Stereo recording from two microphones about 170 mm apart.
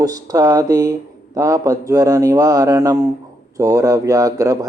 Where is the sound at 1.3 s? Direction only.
20° right (ahead or behind).